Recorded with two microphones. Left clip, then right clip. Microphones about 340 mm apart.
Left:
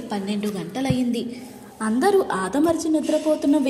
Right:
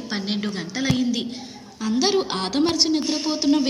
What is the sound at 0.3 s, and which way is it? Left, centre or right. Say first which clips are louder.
A woman's voice: even; centre.